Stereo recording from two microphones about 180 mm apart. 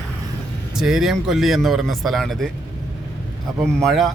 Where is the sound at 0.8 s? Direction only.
Centre (ahead or behind).